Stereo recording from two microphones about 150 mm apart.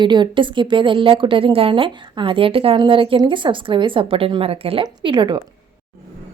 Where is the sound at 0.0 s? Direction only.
30° right (ahead or behind).